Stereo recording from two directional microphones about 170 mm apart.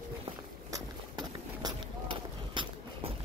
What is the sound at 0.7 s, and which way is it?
Run, 25° right (ahead or behind).